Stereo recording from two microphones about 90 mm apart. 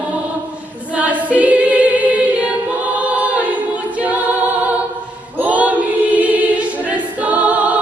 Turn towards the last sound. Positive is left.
turn(degrees=-15)  # may be behind; listen again after turning